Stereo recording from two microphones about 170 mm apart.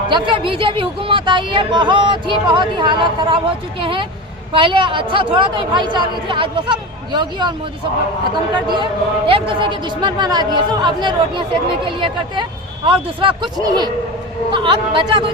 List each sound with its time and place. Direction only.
0.1 s speech: 30° right (ahead or behind)
8.7 s speech: 30° right (ahead or behind)